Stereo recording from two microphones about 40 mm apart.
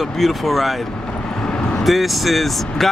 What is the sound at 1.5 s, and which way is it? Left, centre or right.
Vehicle, left.